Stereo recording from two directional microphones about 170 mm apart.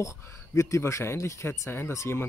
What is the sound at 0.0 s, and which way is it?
Speech, 15° left (ahead or behind).